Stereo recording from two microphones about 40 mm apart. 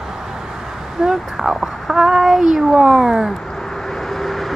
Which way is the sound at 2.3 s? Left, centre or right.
Centre.